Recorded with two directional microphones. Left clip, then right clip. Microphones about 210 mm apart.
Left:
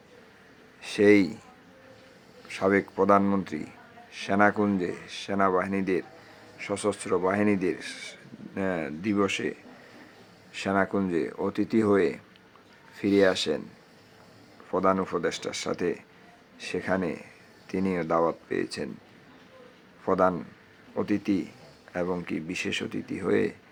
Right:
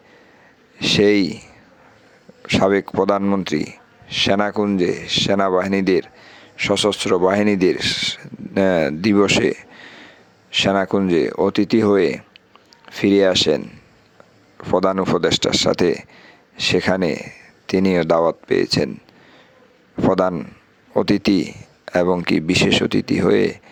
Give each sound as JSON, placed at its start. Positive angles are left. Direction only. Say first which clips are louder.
{"t": 0.8, "sound": "speech", "louder": "right 6 dB", "side_deg": -40}
{"t": 2.5, "sound": "speech", "louder": "right 9 dB", "side_deg": -40}
{"t": 14.7, "sound": "speech", "louder": "right 8 dB", "side_deg": -40}
{"t": 20.1, "sound": "speech", "louder": "right 6 dB", "side_deg": -40}